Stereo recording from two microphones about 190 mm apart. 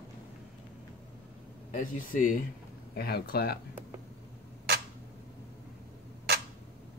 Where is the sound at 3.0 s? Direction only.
55° left (ahead or behind).